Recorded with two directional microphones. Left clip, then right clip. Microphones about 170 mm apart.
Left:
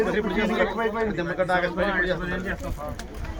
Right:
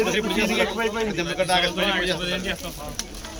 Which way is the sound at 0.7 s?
25° right (ahead or behind).